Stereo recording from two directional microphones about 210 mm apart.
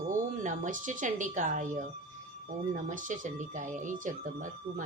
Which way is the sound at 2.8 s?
40° right (ahead or behind).